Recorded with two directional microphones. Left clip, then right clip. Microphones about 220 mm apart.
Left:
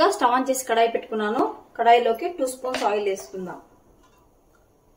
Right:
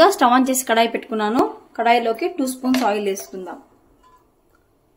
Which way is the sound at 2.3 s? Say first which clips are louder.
Right 4 dB; 50° right (ahead or behind).